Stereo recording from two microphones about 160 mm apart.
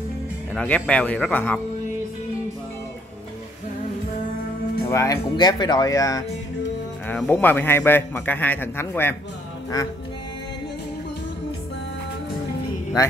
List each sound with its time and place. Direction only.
0.6 s a man's voice: 5° left (ahead or behind)
4.8 s speech: 20° left (ahead or behind)
7.1 s a man's voice: 10° left (ahead or behind)